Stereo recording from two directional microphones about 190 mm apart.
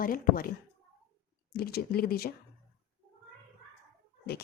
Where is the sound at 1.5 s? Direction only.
55° left (ahead or behind).